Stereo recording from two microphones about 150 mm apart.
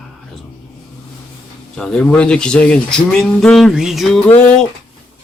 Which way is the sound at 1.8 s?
5° left (ahead or behind).